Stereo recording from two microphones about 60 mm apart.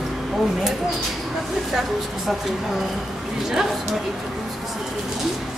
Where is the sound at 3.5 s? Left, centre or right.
Centre.